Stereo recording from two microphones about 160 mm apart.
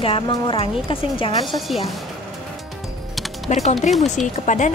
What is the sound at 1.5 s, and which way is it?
Speech, centre (ahead or behind).